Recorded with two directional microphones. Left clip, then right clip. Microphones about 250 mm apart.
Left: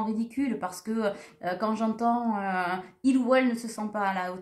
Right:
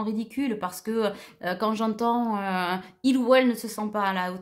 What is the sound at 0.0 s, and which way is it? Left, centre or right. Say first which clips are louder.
Speech: right 1 dB; right.